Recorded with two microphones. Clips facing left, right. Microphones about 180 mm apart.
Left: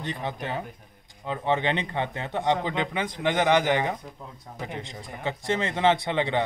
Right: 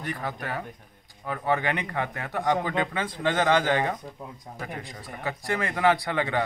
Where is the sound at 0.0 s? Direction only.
25° left (ahead or behind).